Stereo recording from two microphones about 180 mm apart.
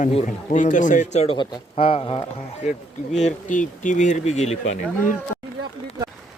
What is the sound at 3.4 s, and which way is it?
Speech, 45° left (ahead or behind).